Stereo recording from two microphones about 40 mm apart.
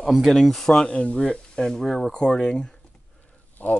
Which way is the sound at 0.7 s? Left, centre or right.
Left.